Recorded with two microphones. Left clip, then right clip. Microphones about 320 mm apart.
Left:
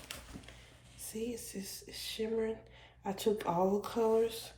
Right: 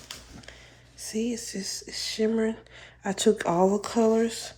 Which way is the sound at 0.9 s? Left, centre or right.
Right.